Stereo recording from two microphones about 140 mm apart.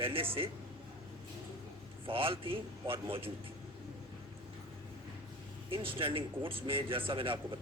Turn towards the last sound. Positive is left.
turn(degrees=-40)  # may be behind; listen again after turning